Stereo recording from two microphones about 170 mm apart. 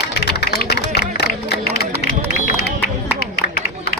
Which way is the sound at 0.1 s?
75° left (ahead or behind).